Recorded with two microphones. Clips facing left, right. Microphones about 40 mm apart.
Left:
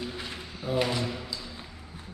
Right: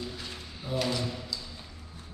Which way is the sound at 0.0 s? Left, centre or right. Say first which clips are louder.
Left 3 dB; left.